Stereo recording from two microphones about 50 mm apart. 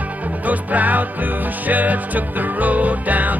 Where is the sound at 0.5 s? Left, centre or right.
Right.